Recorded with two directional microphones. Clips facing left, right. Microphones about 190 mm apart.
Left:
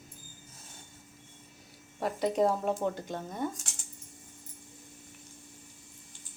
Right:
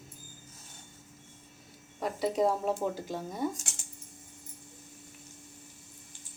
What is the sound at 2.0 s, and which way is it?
Speech, centre (ahead or behind).